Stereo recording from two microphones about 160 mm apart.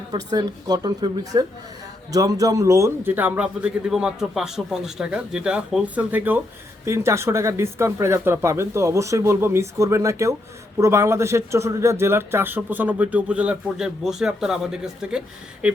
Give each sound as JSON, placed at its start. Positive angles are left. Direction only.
{"t": 0.1, "sound": "a woman's voice", "side_deg": -25}